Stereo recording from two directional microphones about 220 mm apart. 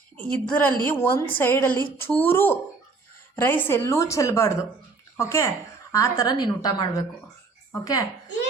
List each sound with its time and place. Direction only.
0.2 s a woman's voice: 5° left (ahead or behind)